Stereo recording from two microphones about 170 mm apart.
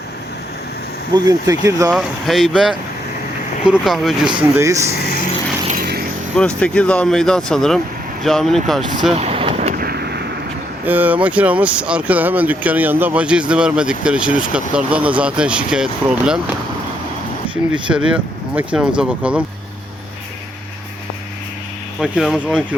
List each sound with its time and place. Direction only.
1.1 s speech: 20° right (ahead or behind)
1.9 s speech: centre (ahead or behind)
4.4 s speech: 15° right (ahead or behind)
4.9 s vehicle: 55° left (ahead or behind)
5.7 s vehicle: 65° right (ahead or behind)
6.6 s speech: 5° left (ahead or behind)
9.1 s vehicle: 35° right (ahead or behind)
9.6 s vehicle: 50° right (ahead or behind); by 10.2 s 70° right (ahead or behind)
10.8 s speech: 10° right (ahead or behind)
17.8 s speech: 5° right (ahead or behind)
22.0 s speech: centre (ahead or behind)